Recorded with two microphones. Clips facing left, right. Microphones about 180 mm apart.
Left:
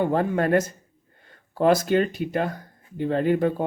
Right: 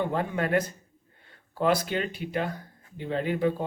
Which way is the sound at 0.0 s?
45° left (ahead or behind).